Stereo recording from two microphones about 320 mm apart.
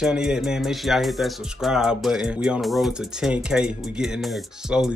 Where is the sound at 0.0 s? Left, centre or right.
Centre.